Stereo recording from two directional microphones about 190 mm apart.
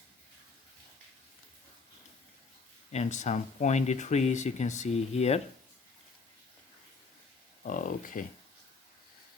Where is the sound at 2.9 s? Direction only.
35° left (ahead or behind).